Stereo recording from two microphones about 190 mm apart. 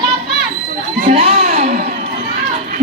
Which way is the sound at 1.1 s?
30° right (ahead or behind).